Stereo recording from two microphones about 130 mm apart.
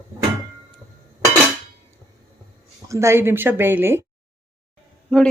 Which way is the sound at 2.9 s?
20° right (ahead or behind).